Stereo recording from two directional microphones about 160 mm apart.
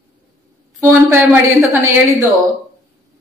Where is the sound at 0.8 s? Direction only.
15° right (ahead or behind).